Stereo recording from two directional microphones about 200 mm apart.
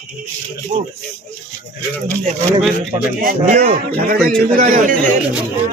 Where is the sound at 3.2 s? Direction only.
45° right (ahead or behind).